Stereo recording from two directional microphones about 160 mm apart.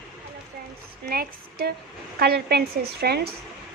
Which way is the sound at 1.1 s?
70° right (ahead or behind).